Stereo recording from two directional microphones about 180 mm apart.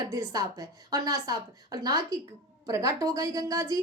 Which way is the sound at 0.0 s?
15° right (ahead or behind).